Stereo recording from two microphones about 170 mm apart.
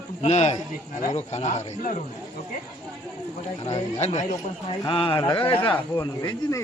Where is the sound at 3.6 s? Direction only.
40° left (ahead or behind).